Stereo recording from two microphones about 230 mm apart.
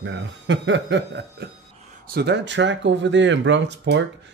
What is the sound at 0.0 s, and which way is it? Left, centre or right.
Speech, right.